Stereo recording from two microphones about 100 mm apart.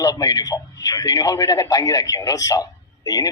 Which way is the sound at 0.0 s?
40° left (ahead or behind).